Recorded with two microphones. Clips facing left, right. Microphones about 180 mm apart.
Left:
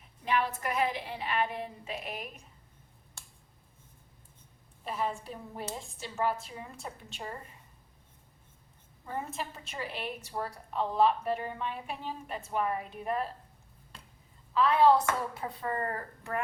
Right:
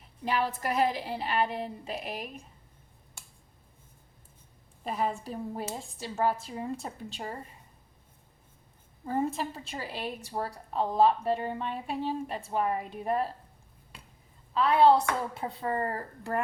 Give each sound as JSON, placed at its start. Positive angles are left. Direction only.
{"t": 0.3, "sound": "a woman's voice", "side_deg": -35}
{"t": 4.8, "sound": "a woman's voice", "side_deg": -40}
{"t": 9.0, "sound": "a woman's voice", "side_deg": -35}
{"t": 14.5, "sound": "speech", "side_deg": -30}